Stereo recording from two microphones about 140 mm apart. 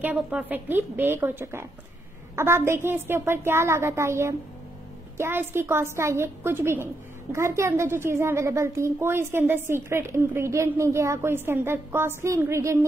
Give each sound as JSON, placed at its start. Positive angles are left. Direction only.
{"t": 0.0, "sound": "a woman's voice", "side_deg": -10}